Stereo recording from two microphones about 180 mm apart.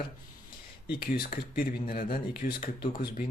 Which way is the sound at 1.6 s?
55° left (ahead or behind).